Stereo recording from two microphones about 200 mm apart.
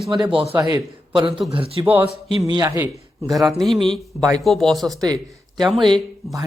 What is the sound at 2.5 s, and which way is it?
Speech, 15° right (ahead or behind).